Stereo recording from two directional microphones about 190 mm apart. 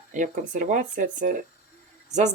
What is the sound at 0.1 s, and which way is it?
Speech, 40° right (ahead or behind).